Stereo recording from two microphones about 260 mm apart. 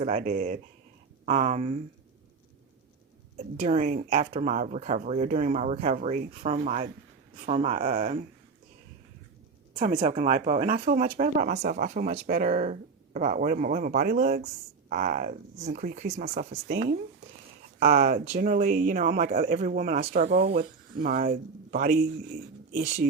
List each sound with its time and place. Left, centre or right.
0.0 s speech: right
3.6 s speech: right
9.7 s speech: right
20.2 s speech: right